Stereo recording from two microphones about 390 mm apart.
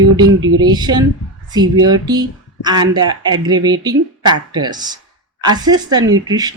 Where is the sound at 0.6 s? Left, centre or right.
Centre.